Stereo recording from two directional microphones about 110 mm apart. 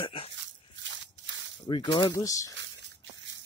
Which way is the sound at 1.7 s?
50° left (ahead or behind).